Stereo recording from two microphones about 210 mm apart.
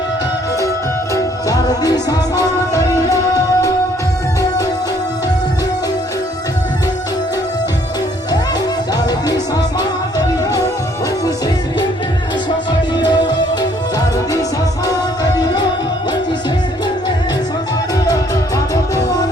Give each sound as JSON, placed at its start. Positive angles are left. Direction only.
{"t": 1.1, "sound": "music", "side_deg": 15}
{"t": 9.0, "sound": "music", "side_deg": 20}
{"t": 13.1, "sound": "music", "side_deg": 20}
{"t": 14.8, "sound": "music", "side_deg": 20}
{"t": 18.0, "sound": "music", "side_deg": 15}